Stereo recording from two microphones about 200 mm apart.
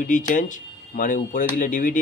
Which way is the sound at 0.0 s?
40° left (ahead or behind).